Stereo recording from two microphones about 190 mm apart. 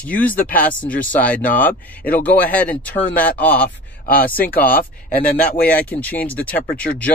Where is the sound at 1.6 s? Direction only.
45° left (ahead or behind).